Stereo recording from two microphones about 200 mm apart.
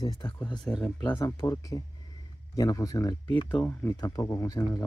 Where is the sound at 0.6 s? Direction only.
Centre (ahead or behind).